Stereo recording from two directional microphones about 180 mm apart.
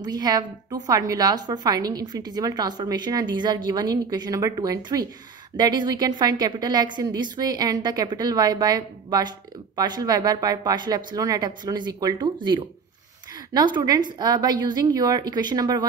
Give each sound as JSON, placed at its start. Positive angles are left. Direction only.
{"t": 0.0, "sound": "a woman's voice", "side_deg": -20}